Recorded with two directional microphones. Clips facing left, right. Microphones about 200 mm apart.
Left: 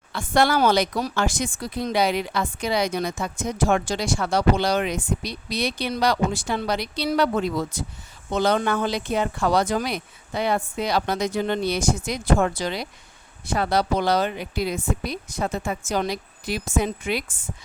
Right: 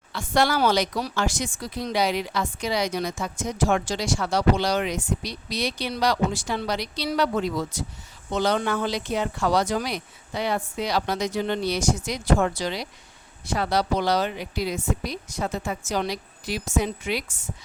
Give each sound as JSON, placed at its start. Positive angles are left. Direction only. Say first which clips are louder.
{"t": 0.1, "sound": "speech", "louder": "left 2 dB", "side_deg": 55}